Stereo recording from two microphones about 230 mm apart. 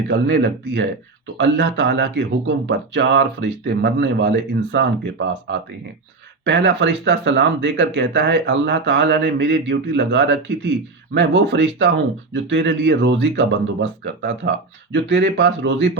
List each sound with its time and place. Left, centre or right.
0.1 s speech: right